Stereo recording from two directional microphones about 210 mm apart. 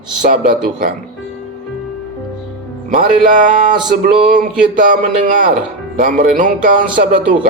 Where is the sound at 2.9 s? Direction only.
40° right (ahead or behind).